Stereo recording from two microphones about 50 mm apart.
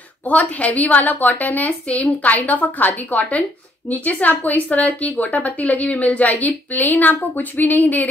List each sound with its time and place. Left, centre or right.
0.3 s a woman's voice: left